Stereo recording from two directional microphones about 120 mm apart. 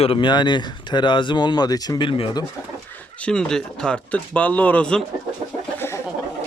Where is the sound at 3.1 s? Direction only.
10° left (ahead or behind).